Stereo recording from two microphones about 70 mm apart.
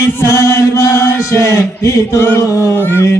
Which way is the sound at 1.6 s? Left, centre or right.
Left.